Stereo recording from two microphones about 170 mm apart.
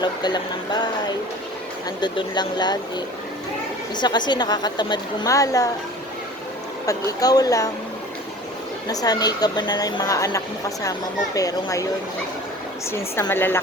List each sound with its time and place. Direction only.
0.0 s a woman's voice: 25° left (ahead or behind)
6.8 s a woman's voice: 20° left (ahead or behind)
8.9 s a woman's voice: 20° left (ahead or behind)
12.9 s a woman's voice: 15° left (ahead or behind)